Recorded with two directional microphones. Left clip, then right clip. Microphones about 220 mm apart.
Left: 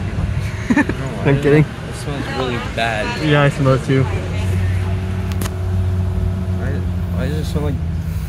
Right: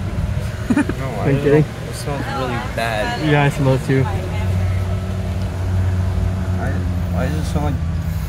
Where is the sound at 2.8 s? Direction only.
30° right (ahead or behind).